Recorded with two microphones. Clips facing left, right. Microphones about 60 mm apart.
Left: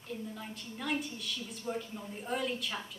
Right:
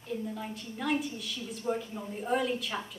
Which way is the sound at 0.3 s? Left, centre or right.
Centre.